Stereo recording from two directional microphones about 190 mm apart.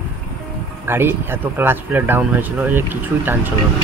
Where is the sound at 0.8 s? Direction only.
10° right (ahead or behind).